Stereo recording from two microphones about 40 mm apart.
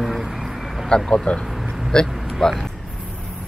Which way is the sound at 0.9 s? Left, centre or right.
Left.